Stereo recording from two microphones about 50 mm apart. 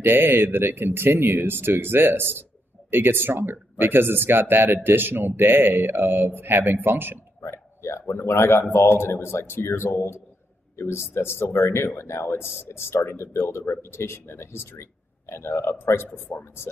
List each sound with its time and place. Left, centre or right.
0.0 s speech: right
8.1 s speech: left
16.3 s speech: left